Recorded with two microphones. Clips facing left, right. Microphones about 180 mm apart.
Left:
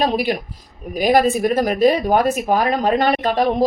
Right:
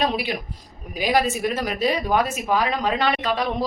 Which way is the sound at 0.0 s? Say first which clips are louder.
Left 5 dB; 45° left (ahead or behind).